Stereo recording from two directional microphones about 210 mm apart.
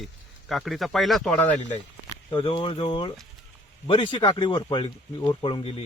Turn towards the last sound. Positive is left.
turn(degrees=25)  # may be behind; listen again after turning